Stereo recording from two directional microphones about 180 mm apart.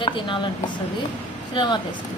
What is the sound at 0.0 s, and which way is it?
A woman's voice, 25° left (ahead or behind).